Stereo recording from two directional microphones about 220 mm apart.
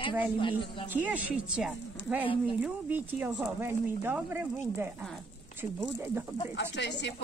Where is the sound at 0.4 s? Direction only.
25° left (ahead or behind).